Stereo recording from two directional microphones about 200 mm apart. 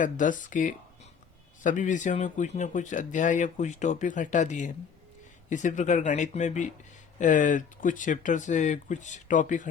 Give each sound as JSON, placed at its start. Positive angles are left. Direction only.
{"t": 0.0, "sound": "speech", "side_deg": 40}